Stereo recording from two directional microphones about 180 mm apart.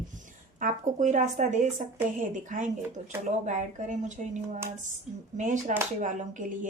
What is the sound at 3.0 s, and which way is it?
Speech, 40° right (ahead or behind).